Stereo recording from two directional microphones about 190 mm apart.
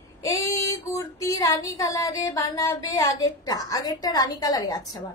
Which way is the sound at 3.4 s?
20° left (ahead or behind).